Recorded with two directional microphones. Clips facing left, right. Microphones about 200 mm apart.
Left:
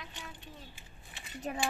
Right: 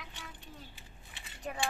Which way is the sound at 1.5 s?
25° left (ahead or behind).